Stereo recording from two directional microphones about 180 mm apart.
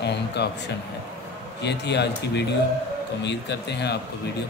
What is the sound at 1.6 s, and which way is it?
A man's voice, 70° left (ahead or behind).